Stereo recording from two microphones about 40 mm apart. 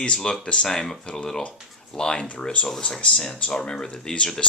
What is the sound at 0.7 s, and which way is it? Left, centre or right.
Speech, centre.